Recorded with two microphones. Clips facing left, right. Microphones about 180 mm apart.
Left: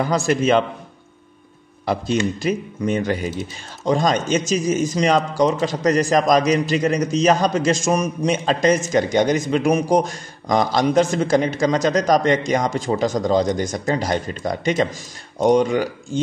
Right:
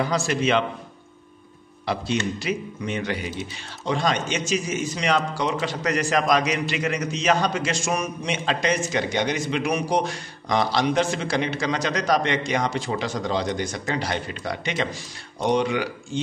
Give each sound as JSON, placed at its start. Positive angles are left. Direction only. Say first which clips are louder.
{"t": 0.0, "sound": "a man's voice", "louder": "left 4 dB", "side_deg": 50}
{"t": 2.3, "sound": "a man's voice", "louder": "left 5 dB", "side_deg": 45}